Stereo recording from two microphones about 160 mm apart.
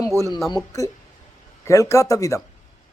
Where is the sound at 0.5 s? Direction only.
20° left (ahead or behind).